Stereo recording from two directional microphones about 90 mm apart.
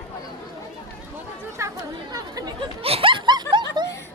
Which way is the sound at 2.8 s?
90° right.